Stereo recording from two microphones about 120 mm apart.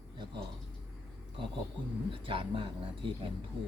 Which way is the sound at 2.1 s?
45° right (ahead or behind).